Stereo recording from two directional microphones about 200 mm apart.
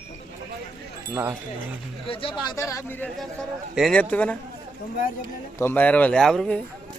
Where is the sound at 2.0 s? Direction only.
25° left (ahead or behind); by 4.4 s 5° left (ahead or behind).